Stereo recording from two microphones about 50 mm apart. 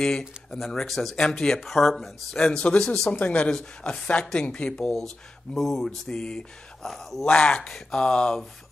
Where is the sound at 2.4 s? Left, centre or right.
Centre.